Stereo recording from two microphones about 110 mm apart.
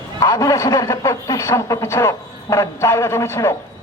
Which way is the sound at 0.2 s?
30° left (ahead or behind).